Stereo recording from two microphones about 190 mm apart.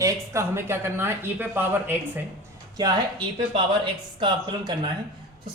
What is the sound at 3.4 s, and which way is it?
Speech, 25° right (ahead or behind).